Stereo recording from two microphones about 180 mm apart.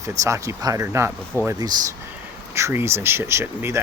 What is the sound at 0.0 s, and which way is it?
Speech, 20° right (ahead or behind).